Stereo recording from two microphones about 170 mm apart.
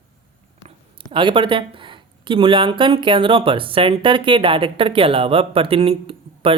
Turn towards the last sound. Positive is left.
turn(degrees=-30)  # may be behind; listen again after turning